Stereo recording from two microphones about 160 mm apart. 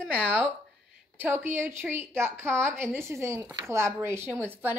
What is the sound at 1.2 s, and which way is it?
A woman's voice, 10° right (ahead or behind).